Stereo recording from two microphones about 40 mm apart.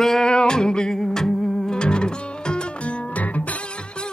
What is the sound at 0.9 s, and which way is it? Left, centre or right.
Music, centre.